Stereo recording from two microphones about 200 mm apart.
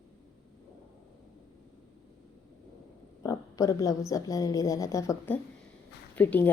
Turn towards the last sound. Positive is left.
turn(degrees=10)  # may be behind; listen again after turning